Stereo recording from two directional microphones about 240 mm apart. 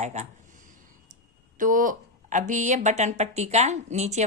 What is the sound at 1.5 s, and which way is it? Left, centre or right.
A woman's voice, right.